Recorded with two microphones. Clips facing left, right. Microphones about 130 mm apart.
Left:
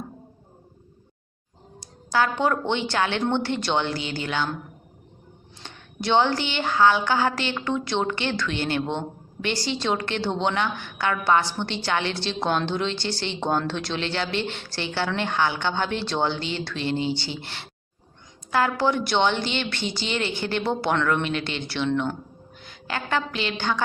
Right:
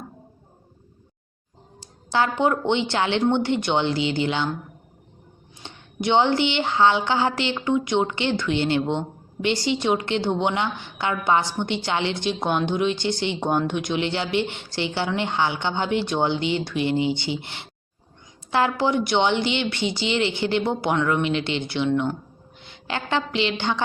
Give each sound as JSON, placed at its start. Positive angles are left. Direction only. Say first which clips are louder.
{"t": 2.0, "sound": "a woman's voice", "louder": "right 1 dB", "side_deg": -25}
{"t": 5.6, "sound": "a woman's voice", "louder": "right 2 dB", "side_deg": -20}